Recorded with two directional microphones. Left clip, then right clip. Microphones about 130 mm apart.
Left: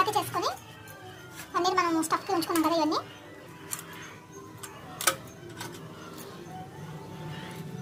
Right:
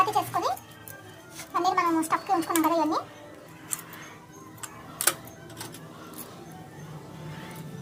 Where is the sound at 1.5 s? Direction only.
10° right (ahead or behind).